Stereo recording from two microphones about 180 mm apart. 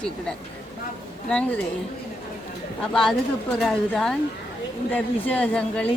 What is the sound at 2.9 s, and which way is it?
A woman's voice, 5° left (ahead or behind).